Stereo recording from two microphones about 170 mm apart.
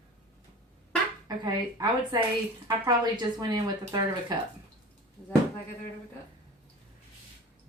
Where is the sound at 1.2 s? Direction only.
25° right (ahead or behind).